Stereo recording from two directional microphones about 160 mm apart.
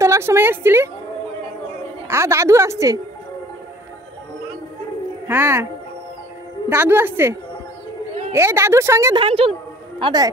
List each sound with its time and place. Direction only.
0.0 s a woman's voice: 15° right (ahead or behind)
2.0 s a woman's voice: 15° right (ahead or behind)
5.3 s a woman's voice: 15° right (ahead or behind)
6.7 s a woman's voice: 15° right (ahead or behind)
9.1 s a woman's voice: 35° right (ahead or behind)